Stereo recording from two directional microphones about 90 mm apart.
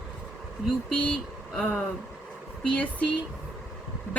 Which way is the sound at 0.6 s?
5° left (ahead or behind).